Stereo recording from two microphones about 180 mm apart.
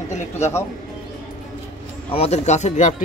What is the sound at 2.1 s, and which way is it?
Speech, 35° left (ahead or behind).